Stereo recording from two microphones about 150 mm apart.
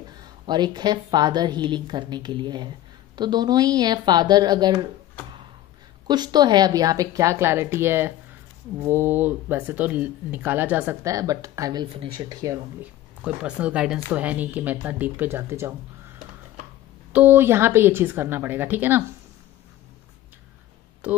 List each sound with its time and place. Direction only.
0.2 s a woman's voice: 30° right (ahead or behind)
6.0 s a woman's voice: 30° right (ahead or behind); by 11.0 s 10° right (ahead or behind)
11.1 s a woman's voice: 20° right (ahead or behind)
13.2 s speech: 10° right (ahead or behind)
17.1 s speech: 15° right (ahead or behind)
21.0 s speech: 10° right (ahead or behind)